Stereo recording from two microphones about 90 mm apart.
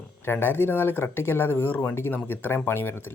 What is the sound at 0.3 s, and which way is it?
Speech, 25° left (ahead or behind).